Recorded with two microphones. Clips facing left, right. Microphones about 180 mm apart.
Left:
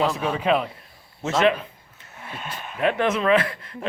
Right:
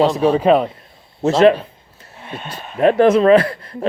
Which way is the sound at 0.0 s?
35° right (ahead or behind).